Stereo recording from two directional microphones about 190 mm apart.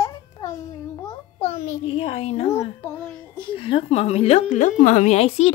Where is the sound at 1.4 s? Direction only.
40° left (ahead or behind).